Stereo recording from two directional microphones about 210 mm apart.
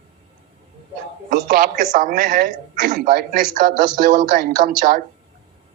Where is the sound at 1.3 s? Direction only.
40° right (ahead or behind).